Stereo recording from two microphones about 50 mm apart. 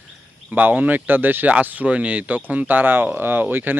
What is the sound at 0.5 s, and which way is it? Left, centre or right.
Speech, right.